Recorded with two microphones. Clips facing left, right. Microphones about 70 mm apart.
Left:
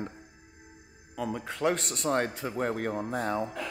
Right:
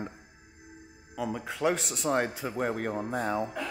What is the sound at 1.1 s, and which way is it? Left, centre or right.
A man's voice, centre.